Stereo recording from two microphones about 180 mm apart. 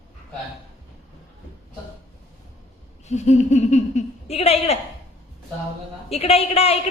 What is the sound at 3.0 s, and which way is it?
Speech, 40° left (ahead or behind).